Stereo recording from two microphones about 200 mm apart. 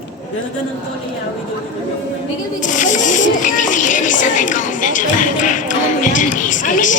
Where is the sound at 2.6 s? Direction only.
40° left (ahead or behind).